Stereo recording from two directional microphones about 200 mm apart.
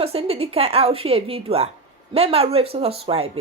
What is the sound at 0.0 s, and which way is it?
A woman's voice, 30° right (ahead or behind).